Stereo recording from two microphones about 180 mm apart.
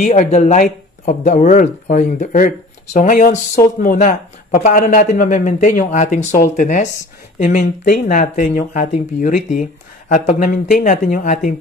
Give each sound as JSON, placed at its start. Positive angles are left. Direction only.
{"t": 0.0, "sound": "speech", "side_deg": 40}